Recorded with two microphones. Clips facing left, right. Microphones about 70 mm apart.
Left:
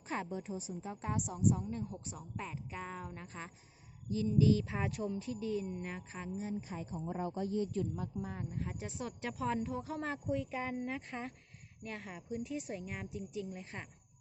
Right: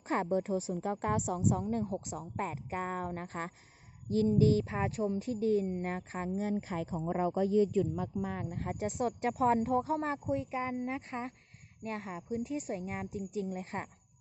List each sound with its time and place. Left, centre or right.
0.1 s a woman's voice: right
1.7 s a woman's voice: right
6.4 s speech: right
8.2 s speech: right
8.5 s speech: right
10.5 s speech: centre
10.8 s speech: right